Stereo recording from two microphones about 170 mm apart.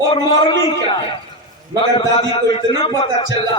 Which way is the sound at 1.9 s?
30° left (ahead or behind).